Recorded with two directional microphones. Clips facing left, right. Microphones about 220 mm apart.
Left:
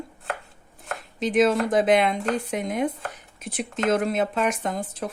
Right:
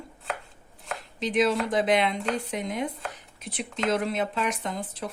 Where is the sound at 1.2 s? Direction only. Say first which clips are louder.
Left 4 dB; 50° left (ahead or behind).